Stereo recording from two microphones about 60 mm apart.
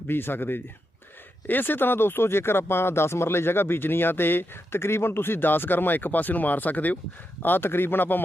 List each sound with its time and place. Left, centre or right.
0.1 s speech: left